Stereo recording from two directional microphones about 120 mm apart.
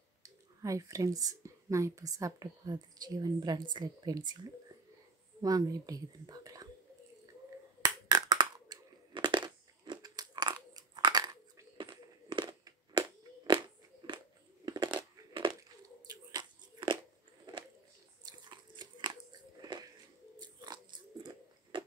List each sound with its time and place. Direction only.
0.2 s a woman's voice: 30° right (ahead or behind)
5.4 s a woman's voice: 30° right (ahead or behind)
7.8 s crushing: 35° right (ahead or behind)
11.8 s a sound: 40° right (ahead or behind)
18.2 s biting: 40° right (ahead or behind)